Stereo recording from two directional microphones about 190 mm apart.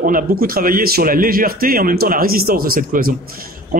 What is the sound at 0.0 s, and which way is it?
A man's voice, 50° right (ahead or behind).